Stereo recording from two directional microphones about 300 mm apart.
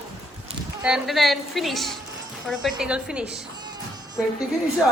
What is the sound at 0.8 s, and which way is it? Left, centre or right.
A woman's voice, centre.